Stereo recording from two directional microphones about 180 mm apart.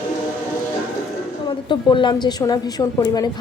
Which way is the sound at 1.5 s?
25° left (ahead or behind).